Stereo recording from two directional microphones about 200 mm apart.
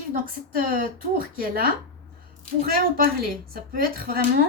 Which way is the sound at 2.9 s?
45° right (ahead or behind).